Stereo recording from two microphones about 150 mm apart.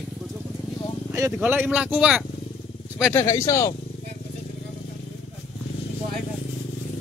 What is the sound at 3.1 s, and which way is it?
Speech, 20° left (ahead or behind).